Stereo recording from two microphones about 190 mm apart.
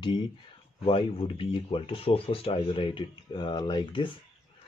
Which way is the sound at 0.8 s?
30° left (ahead or behind).